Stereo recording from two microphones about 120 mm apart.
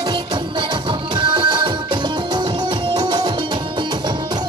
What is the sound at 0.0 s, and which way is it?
Music, 40° right (ahead or behind).